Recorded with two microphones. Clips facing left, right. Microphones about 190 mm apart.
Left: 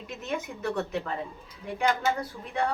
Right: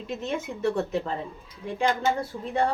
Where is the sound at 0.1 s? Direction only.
30° right (ahead or behind).